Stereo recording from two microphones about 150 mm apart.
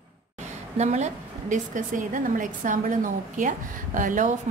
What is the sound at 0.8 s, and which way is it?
A woman's voice, 50° right (ahead or behind).